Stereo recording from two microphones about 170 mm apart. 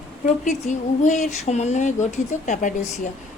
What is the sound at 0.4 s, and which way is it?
Speech, 45° left (ahead or behind).